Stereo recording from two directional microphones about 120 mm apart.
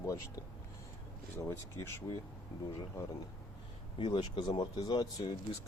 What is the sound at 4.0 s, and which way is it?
Speech, 40° left (ahead or behind).